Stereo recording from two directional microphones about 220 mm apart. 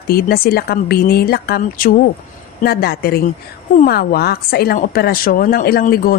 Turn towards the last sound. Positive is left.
turn(degrees=40)  # may be behind; listen again after turning